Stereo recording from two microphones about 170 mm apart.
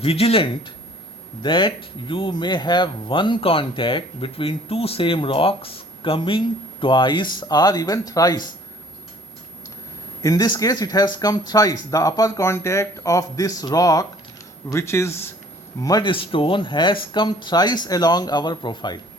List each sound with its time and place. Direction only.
0.0 s speech: 35° left (ahead or behind)
10.2 s speech: 25° left (ahead or behind)